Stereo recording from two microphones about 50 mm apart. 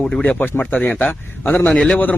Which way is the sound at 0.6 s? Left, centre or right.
Left.